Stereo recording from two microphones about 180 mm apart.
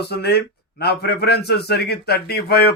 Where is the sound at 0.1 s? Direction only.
65° left (ahead or behind).